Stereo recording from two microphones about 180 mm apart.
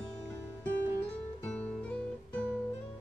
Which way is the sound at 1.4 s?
10° left (ahead or behind).